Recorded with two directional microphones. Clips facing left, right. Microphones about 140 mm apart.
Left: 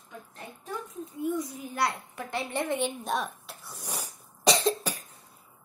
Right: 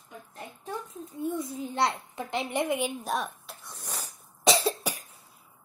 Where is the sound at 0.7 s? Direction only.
25° right (ahead or behind).